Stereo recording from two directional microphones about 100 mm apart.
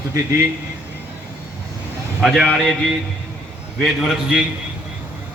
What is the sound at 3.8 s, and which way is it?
Speech, 5° right (ahead or behind).